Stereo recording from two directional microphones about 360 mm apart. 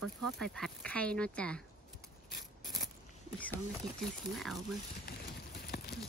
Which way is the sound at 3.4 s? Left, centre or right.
Centre.